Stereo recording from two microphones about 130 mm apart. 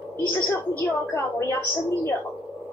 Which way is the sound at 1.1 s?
20° left (ahead or behind).